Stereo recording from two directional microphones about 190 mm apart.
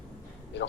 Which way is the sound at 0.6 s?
70° left (ahead or behind).